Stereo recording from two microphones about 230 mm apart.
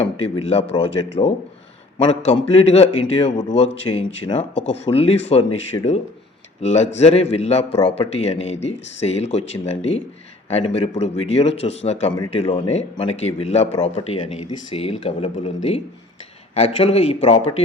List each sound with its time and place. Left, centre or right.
0.4 s speech: left
2.0 s speech: left